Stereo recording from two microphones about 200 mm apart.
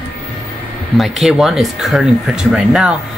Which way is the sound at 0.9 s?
Centre (ahead or behind).